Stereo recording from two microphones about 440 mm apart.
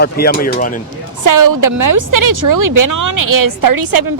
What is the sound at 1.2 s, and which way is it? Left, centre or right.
A woman's voice, right.